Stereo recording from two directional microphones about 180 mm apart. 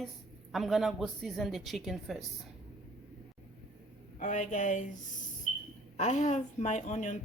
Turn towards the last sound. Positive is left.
turn(degrees=45)  # may be behind; listen again after turning